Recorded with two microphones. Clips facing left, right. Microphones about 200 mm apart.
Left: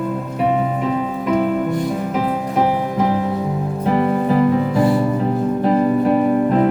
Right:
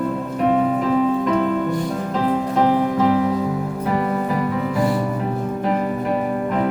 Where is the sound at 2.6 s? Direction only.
20° left (ahead or behind).